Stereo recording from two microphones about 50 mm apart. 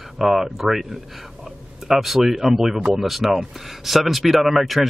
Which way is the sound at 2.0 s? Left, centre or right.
Centre.